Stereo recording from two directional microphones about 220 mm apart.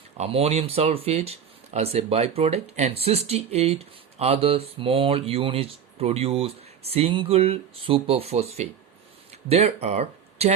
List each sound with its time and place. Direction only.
0.2 s speech: 25° right (ahead or behind)